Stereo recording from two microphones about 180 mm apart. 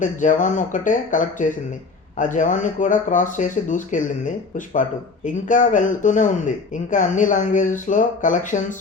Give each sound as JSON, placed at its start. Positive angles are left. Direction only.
{"t": 0.0, "sound": "speech", "side_deg": 45}